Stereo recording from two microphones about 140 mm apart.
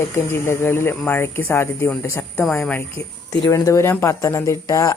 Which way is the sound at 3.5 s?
25° left (ahead or behind).